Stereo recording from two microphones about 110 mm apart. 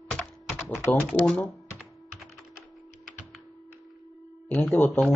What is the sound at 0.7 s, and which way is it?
Speech, centre (ahead or behind).